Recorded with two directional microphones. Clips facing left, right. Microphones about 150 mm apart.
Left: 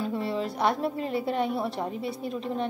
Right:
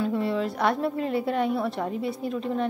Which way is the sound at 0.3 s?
30° left (ahead or behind).